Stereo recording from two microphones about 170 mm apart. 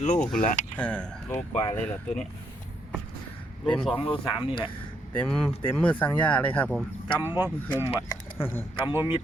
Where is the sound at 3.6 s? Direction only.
5° left (ahead or behind).